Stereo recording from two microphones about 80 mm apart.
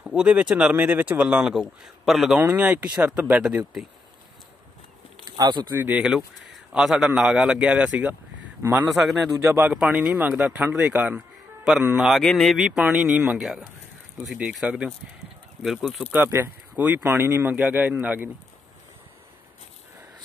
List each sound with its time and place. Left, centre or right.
0.1 s speech: centre
2.5 s speech: centre
5.4 s speech: right
5.7 s speech: right
5.9 s speech: centre
9.0 s speech: centre
9.3 s a man's voice: right
9.6 s speech: centre
11.1 s music: centre
12.2 s speech: centre
12.5 s speech: centre
14.6 s speech: centre
15.6 s speech: centre
16.3 s speech: right